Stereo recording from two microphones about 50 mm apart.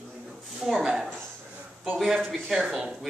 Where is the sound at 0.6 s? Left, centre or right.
Centre.